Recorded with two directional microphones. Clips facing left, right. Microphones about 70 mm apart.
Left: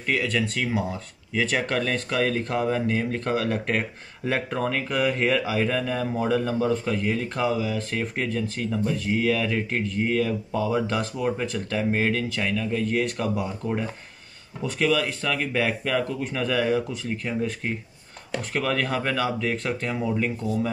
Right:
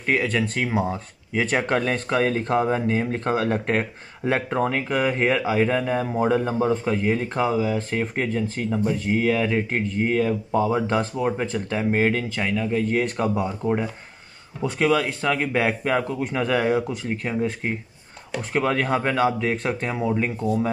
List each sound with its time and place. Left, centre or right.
0.0 s speech: right